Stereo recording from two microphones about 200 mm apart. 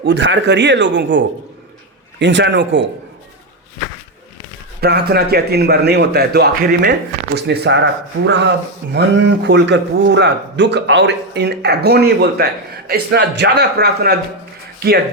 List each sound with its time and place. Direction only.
0.0 s speech: 60° right (ahead or behind)
4.8 s a man's voice: 50° right (ahead or behind)